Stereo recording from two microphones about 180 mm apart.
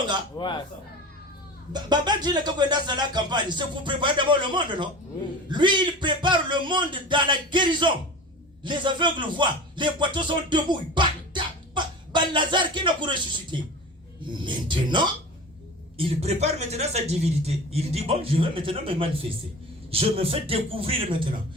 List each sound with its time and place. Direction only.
0.3 s speech: 25° left (ahead or behind)
1.7 s speech: 25° right (ahead or behind)